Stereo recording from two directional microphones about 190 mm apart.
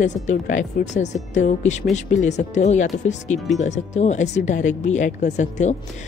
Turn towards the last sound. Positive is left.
turn(degrees=40)  # may be behind; listen again after turning